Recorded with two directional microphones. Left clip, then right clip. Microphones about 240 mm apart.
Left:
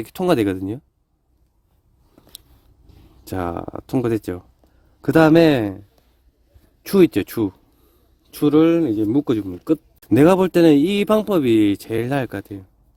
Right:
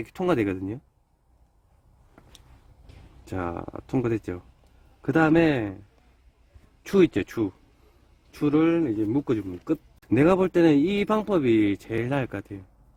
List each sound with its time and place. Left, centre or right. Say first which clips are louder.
0.0 s speech: left 6 dB; left
3.2 s speech: left 6 dB; left
6.8 s speech: left 5 dB; left